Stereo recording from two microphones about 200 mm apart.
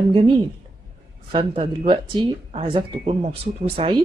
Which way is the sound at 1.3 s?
25° right (ahead or behind).